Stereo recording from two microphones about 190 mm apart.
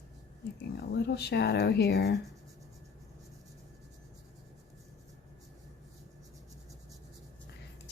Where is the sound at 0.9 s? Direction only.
60° left (ahead or behind).